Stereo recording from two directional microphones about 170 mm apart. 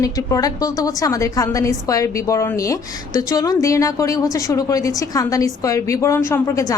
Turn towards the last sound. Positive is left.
turn(degrees=20)  # may be behind; listen again after turning